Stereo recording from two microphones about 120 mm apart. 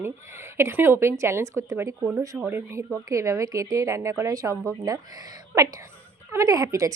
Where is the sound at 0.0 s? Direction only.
20° right (ahead or behind).